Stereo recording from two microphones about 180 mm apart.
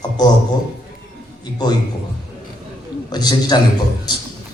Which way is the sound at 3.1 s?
25° left (ahead or behind).